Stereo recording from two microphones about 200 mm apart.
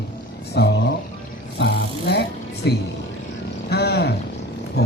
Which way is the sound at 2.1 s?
55° left (ahead or behind).